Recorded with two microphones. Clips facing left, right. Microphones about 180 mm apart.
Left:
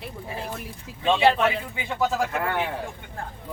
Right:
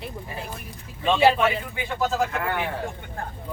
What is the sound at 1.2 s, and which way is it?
Speech, 5° right (ahead or behind).